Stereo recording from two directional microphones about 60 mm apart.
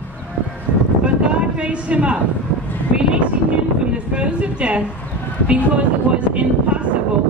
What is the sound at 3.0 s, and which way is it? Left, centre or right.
Speech, centre.